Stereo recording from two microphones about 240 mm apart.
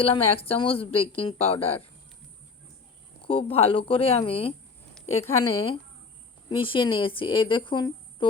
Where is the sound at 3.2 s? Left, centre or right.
Left.